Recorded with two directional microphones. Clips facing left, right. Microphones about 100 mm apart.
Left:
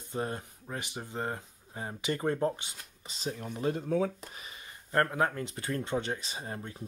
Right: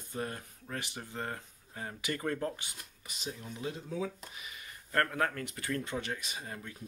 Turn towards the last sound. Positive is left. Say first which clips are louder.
# left 3 dB
turn(degrees=30)  # may be behind; listen again after turning